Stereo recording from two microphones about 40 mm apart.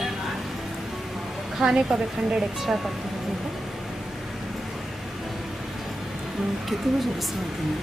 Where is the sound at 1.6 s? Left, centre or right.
Right.